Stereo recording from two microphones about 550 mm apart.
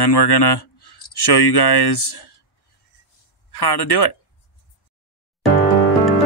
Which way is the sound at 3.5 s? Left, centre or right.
Left.